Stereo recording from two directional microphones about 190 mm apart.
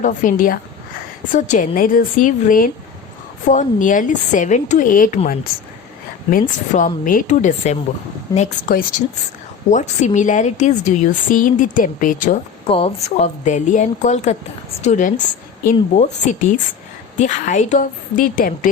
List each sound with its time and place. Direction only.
0.0 s a woman's voice: 45° left (ahead or behind)
6.7 s a woman's voice: 45° left (ahead or behind)
12.6 s a woman's voice: 30° left (ahead or behind); by 18.7 s 45° left (ahead or behind)